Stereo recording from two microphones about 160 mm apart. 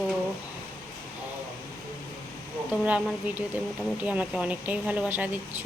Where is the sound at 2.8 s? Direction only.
10° right (ahead or behind).